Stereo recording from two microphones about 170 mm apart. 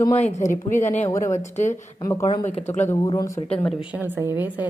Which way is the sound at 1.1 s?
15° left (ahead or behind).